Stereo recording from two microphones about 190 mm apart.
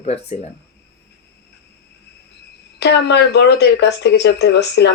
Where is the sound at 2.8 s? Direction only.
60° left (ahead or behind).